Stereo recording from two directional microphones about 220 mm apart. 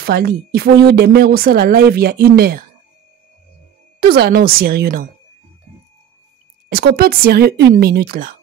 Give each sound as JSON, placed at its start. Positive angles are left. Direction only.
{"t": 0.0, "sound": "speech", "side_deg": -45}
{"t": 4.0, "sound": "speech", "side_deg": -45}
{"t": 6.7, "sound": "speech", "side_deg": -45}